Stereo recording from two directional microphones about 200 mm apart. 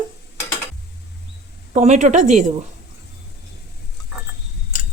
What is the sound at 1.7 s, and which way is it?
Speech, 35° right (ahead or behind).